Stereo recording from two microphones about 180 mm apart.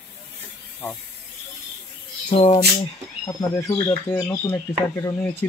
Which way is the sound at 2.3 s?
40° left (ahead or behind).